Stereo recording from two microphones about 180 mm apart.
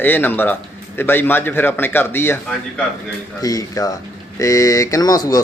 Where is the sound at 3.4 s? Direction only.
20° left (ahead or behind).